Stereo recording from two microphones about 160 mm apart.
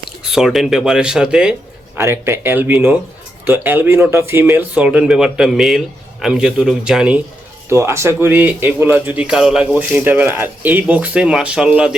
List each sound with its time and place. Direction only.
0.3 s speech: centre (ahead or behind)
2.0 s speech: 15° right (ahead or behind)
7.7 s speech: 15° right (ahead or behind)